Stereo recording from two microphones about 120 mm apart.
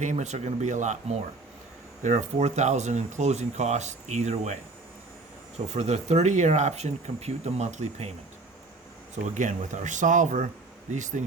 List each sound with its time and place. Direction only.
0.0 s speech: 85° right
2.0 s speech: 75° right (ahead or behind)
5.6 s speech: 65° right (ahead or behind)
9.2 s speech: 90° right